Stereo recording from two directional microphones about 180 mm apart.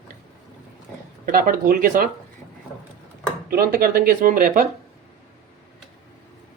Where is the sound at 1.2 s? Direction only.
55° right (ahead or behind).